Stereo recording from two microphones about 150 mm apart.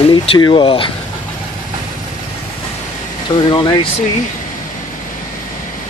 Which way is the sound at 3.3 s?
30° left (ahead or behind).